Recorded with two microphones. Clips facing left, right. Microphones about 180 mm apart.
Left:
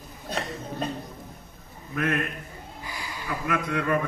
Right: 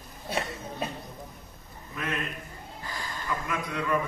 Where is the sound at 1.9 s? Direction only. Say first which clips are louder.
Left 7 dB; 55° left (ahead or behind).